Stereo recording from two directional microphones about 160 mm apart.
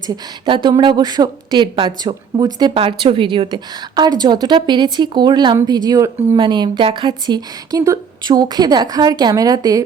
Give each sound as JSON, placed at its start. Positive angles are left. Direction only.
{"t": 0.1, "sound": "speech", "side_deg": -30}